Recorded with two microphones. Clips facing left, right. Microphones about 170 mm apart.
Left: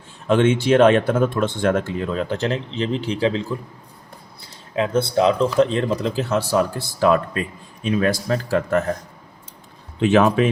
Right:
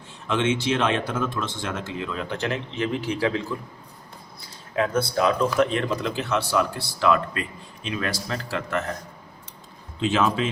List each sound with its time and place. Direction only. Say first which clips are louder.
0.3 s speech: left 7 dB; 50° left (ahead or behind)
2.0 s speech: left 6 dB; 40° left (ahead or behind)
4.7 s speech: left 4 dB; 25° left (ahead or behind); by 9.0 s 45° left (ahead or behind)
10.0 s speech: left 7 dB; 60° left (ahead or behind)